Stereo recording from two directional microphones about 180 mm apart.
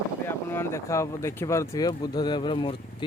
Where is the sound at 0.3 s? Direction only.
10° left (ahead or behind).